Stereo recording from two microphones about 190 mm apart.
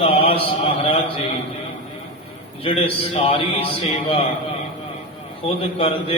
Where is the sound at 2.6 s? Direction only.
30° left (ahead or behind).